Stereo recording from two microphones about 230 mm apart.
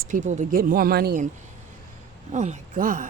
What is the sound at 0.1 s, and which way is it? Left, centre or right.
Speech, right.